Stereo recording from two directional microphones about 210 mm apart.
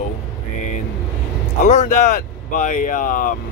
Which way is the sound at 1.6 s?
35° left (ahead or behind).